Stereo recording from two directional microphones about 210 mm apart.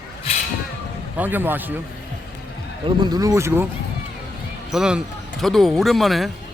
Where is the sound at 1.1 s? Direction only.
10° right (ahead or behind).